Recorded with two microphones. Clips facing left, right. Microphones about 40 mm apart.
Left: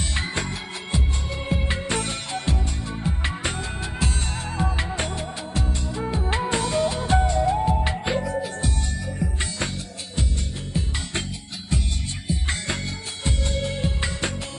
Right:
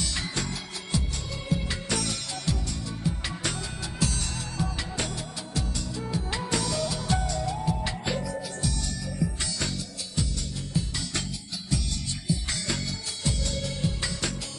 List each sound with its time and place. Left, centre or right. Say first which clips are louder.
1.5 s music: left 3 dB; left
11.7 s music: left 3 dB; left